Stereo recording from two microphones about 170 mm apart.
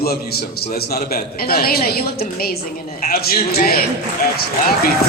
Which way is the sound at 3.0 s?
60° left (ahead or behind).